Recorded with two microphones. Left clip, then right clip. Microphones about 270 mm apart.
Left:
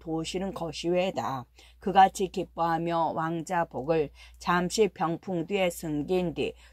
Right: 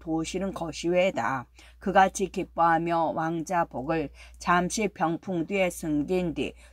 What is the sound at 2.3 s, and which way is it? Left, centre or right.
Speech, centre.